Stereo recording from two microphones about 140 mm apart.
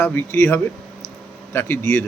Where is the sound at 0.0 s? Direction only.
15° left (ahead or behind).